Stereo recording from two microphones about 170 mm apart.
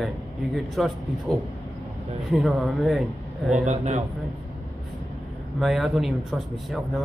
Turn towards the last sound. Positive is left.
turn(degrees=0)  # may be behind; listen again after turning